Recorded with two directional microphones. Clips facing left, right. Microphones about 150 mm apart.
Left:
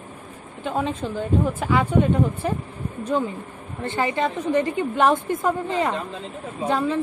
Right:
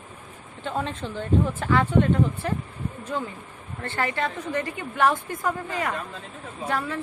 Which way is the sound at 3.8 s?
15° left (ahead or behind).